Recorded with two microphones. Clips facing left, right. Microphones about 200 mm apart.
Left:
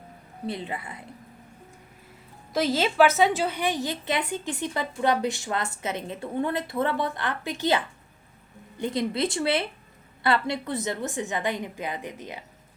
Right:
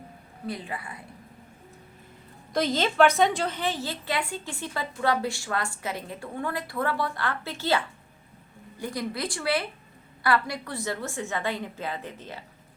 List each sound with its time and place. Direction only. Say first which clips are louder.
0.4 s a woman's voice: left 2 dB; 25° left (ahead or behind)
2.5 s a woman's voice: left 1 dB; 5° left (ahead or behind)
8.8 s a woman's voice: left 5 dB; 25° left (ahead or behind)